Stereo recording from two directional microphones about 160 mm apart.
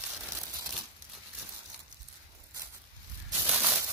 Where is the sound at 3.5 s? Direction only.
5° right (ahead or behind).